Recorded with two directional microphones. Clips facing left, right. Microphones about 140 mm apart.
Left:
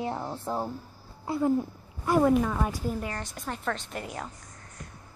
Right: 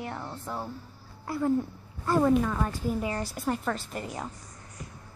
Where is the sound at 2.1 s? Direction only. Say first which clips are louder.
Left 1 dB; 10° left (ahead or behind).